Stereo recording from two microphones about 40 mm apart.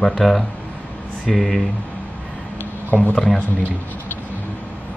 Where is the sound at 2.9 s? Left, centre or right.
Centre.